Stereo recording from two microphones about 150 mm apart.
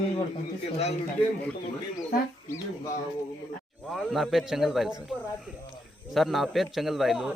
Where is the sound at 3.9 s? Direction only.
Centre (ahead or behind).